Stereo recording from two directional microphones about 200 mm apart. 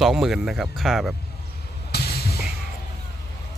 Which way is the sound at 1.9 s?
50° left (ahead or behind).